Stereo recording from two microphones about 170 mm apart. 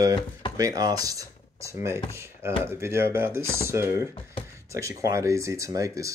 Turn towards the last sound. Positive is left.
turn(degrees=-20)  # may be behind; listen again after turning